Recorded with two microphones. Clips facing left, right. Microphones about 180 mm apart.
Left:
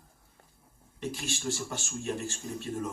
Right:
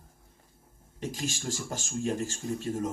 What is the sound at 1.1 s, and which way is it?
Speech, 40° right (ahead or behind).